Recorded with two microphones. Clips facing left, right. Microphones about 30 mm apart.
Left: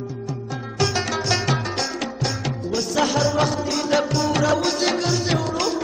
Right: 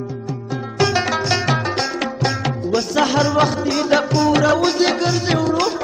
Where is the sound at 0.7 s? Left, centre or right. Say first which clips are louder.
Right 5 dB; centre.